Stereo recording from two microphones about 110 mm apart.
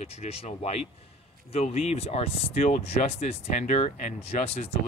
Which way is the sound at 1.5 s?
65° left (ahead or behind).